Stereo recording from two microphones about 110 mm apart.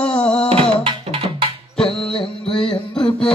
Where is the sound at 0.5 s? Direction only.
55° right (ahead or behind).